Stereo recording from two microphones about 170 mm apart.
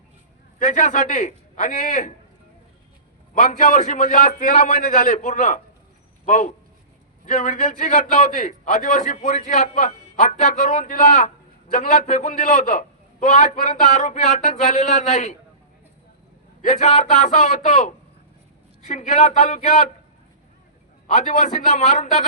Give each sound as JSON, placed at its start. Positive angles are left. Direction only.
{"t": 0.6, "sound": "a man's voice", "side_deg": 45}
{"t": 3.3, "sound": "a man's voice", "side_deg": 50}
{"t": 16.6, "sound": "a man's voice", "side_deg": 40}
{"t": 21.1, "sound": "a man's voice", "side_deg": 45}